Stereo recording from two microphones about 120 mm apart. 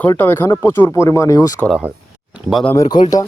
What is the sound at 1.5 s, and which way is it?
Speech, 5° left (ahead or behind).